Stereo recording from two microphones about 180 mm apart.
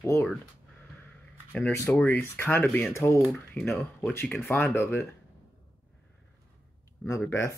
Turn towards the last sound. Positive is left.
turn(degrees=15)  # may be behind; listen again after turning